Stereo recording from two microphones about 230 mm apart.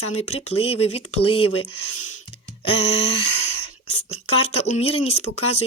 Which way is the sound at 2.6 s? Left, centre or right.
Left.